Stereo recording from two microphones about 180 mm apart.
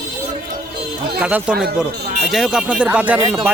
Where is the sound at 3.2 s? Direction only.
25° right (ahead or behind).